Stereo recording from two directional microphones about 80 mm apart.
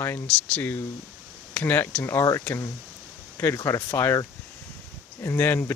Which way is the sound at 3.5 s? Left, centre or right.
Left.